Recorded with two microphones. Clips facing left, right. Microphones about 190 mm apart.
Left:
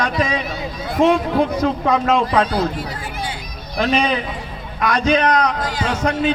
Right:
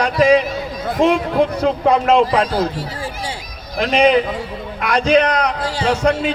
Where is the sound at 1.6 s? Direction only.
30° right (ahead or behind).